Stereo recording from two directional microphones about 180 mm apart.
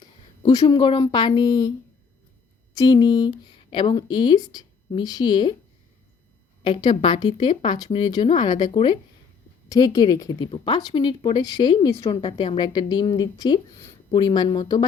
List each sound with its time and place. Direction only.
0.6 s speech: 30° left (ahead or behind)
2.7 s speech: 25° left (ahead or behind)
6.6 s speech: 25° left (ahead or behind)